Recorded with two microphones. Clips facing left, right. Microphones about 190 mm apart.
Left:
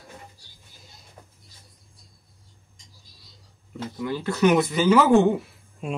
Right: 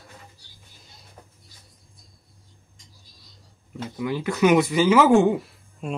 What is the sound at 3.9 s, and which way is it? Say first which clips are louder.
Speech: right 2 dB; 15° right (ahead or behind).